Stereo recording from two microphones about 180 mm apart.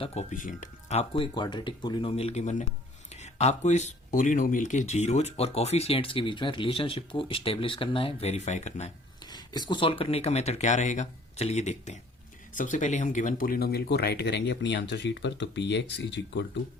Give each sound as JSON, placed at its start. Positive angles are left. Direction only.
{"t": 0.0, "sound": "speech", "side_deg": 35}
{"t": 9.3, "sound": "speech", "side_deg": 25}